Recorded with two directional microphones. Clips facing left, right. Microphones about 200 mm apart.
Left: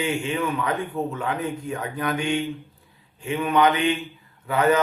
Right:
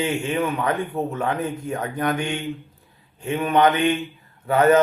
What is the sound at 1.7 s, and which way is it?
Speech, 45° right (ahead or behind).